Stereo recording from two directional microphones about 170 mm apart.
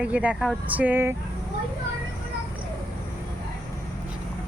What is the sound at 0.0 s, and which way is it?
Speech, 5° right (ahead or behind).